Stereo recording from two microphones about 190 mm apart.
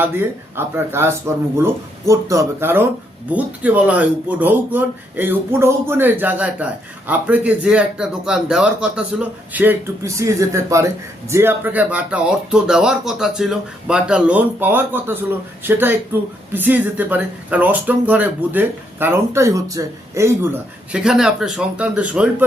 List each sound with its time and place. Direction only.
0.0 s speech: 10° right (ahead or behind)